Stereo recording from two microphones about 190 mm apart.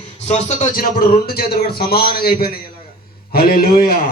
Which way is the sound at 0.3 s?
35° left (ahead or behind).